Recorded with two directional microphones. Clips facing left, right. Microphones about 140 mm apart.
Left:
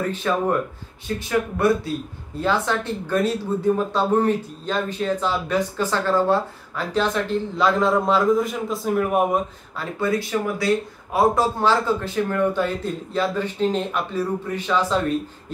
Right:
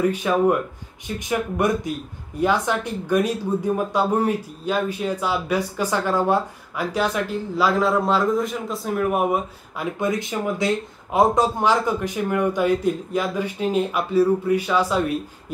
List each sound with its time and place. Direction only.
0.0 s speech: 10° right (ahead or behind)
9.8 s speech: 20° right (ahead or behind)